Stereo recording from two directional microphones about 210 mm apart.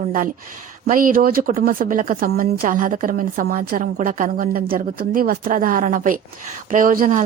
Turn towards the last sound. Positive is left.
turn(degrees=-40)  # may be behind; listen again after turning